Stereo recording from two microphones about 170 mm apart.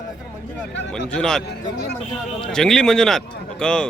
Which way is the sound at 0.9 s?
5° left (ahead or behind).